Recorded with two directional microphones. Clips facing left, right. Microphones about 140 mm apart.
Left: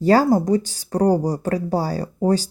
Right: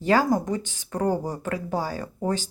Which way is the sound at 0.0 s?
35° left (ahead or behind).